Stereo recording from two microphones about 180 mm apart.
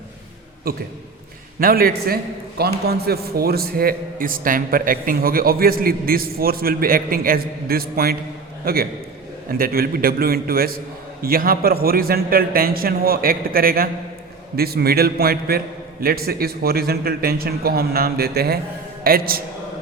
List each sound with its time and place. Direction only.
0.7 s a man's voice: 55° right (ahead or behind)